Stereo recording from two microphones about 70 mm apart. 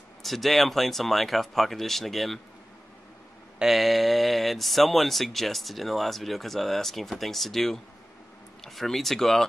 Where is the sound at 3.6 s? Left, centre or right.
Centre.